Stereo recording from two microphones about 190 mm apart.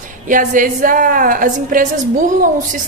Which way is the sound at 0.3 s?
45° right (ahead or behind).